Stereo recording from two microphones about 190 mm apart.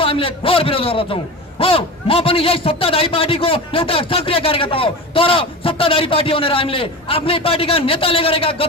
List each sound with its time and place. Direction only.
0.0 s a man's voice: 30° left (ahead or behind)